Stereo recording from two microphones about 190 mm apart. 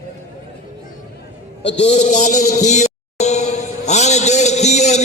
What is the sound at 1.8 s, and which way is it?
Speech, 35° left (ahead or behind).